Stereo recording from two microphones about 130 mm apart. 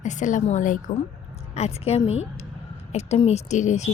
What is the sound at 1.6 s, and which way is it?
A woman's voice, 55° left (ahead or behind).